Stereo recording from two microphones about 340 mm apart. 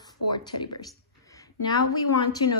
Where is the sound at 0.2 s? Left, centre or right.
Left.